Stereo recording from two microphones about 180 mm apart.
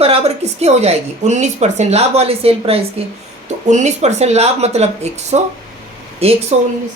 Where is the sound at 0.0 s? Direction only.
35° right (ahead or behind).